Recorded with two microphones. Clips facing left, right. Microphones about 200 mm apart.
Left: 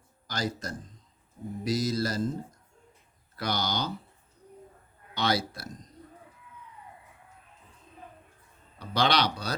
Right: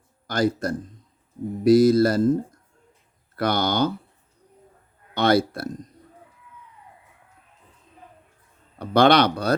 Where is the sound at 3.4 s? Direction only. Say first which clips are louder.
Right 9 dB; 55° right (ahead or behind).